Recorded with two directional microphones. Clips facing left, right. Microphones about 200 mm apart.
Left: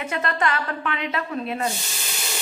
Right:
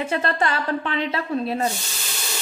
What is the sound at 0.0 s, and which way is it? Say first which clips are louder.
Speech: right 2 dB; 30° right (ahead or behind).